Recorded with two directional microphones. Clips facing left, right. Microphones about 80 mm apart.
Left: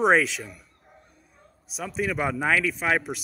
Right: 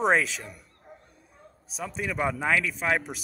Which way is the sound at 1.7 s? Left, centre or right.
Centre.